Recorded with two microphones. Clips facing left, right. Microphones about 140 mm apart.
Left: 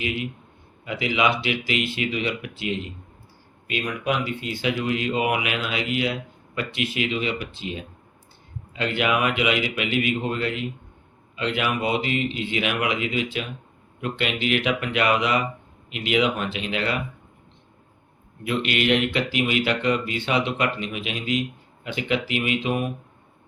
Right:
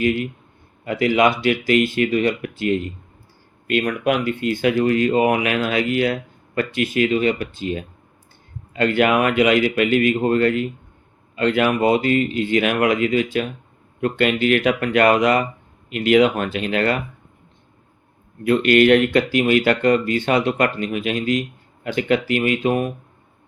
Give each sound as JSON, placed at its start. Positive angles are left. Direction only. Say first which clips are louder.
{"t": 0.9, "sound": "speech", "louder": "right 6 dB", "side_deg": -50}
{"t": 18.4, "sound": "speech", "louder": "right 9 dB", "side_deg": -45}